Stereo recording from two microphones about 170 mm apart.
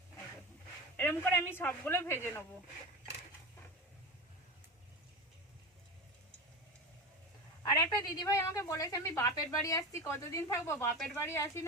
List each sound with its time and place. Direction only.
0.9 s a man's voice: 15° left (ahead or behind)
7.7 s a woman's voice: 25° left (ahead or behind)